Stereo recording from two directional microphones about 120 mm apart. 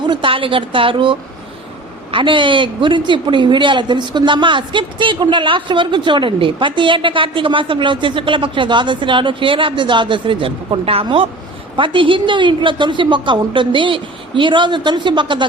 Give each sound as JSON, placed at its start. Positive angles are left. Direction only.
{"t": 0.0, "sound": "a woman's voice", "side_deg": -40}
{"t": 2.1, "sound": "a woman's voice", "side_deg": -45}